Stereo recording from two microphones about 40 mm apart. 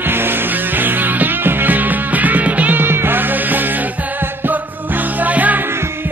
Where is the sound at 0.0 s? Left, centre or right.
Right.